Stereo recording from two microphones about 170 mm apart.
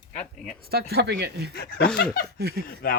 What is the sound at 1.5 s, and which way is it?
Speech, 65° left (ahead or behind).